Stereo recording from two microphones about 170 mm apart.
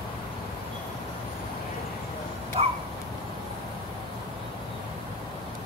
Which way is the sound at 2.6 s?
35° right (ahead or behind).